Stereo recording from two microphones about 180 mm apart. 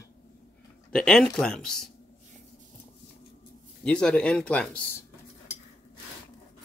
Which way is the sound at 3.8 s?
5° left (ahead or behind).